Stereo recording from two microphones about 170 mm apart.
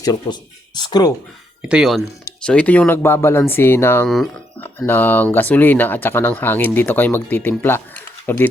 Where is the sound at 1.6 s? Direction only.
5° right (ahead or behind); by 4.1 s 15° left (ahead or behind).